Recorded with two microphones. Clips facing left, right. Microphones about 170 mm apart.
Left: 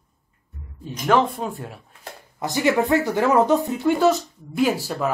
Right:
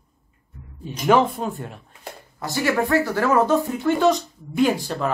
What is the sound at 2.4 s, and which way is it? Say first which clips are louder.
Speech: left 2 dB; 20° left (ahead or behind).